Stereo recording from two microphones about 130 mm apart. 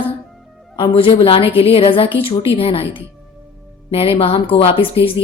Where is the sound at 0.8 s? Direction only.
40° left (ahead or behind).